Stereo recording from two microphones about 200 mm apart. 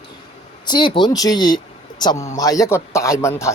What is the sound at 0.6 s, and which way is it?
A woman's voice, 20° left (ahead or behind).